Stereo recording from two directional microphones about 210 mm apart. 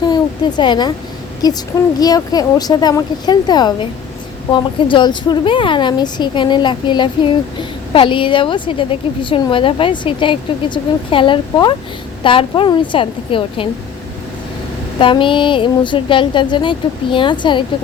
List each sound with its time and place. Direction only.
0.1 s a woman's voice: 20° left (ahead or behind)
14.9 s a woman's voice: 25° left (ahead or behind)